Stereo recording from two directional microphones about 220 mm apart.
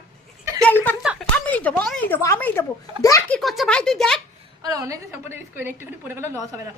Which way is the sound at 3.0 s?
15° left (ahead or behind).